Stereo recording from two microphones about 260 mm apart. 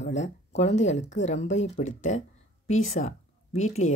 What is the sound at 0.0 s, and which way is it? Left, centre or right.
Speech, left.